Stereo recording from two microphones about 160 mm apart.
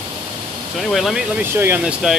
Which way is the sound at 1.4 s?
15° right (ahead or behind).